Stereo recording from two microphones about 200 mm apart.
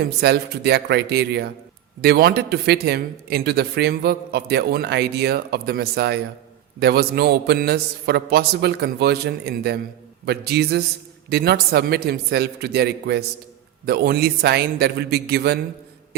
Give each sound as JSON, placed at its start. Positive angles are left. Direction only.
{"t": 0.2, "sound": "a man's voice", "side_deg": -55}